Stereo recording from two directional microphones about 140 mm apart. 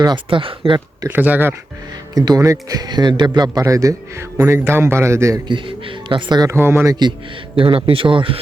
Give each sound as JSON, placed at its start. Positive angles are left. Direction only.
{"t": 0.0, "sound": "speech", "side_deg": -35}
{"t": 1.0, "sound": "speech", "side_deg": -15}
{"t": 2.1, "sound": "speech", "side_deg": -25}
{"t": 5.5, "sound": "speech", "side_deg": -35}
{"t": 6.5, "sound": "speech", "side_deg": -15}
{"t": 7.5, "sound": "speech", "side_deg": -40}